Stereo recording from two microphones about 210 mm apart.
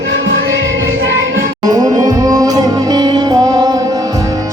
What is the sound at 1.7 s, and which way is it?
Music, 15° right (ahead or behind).